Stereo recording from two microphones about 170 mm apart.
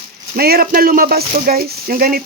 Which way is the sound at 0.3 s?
65° right (ahead or behind).